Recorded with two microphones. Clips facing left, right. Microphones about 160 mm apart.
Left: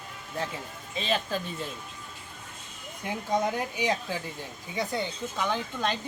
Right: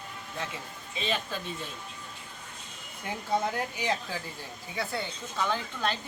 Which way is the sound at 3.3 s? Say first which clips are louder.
Left 2 dB; 15° left (ahead or behind).